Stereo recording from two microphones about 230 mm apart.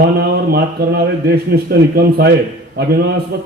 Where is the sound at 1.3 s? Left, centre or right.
Right.